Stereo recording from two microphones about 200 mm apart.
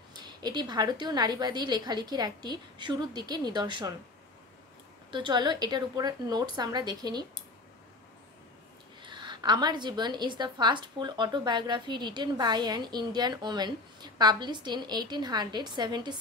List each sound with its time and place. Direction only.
0.1 s a woman's voice: 20° right (ahead or behind)
5.1 s a woman's voice: 20° right (ahead or behind)
9.0 s a woman's voice: 20° right (ahead or behind)